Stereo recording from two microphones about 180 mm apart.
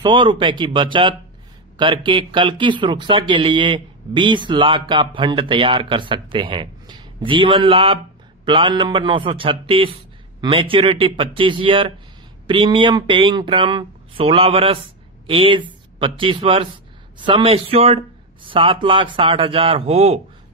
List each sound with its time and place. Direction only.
0.0 s a man's voice: 25° right (ahead or behind)